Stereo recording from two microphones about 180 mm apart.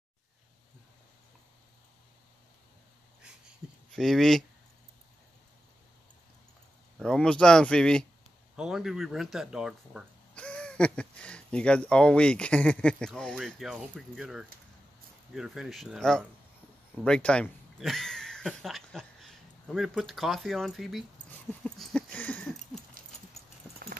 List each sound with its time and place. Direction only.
3.9 s speech: centre (ahead or behind)
7.0 s speech: 5° left (ahead or behind)
21.6 s a sound: 5° left (ahead or behind)
23.0 s dog: 50° right (ahead or behind)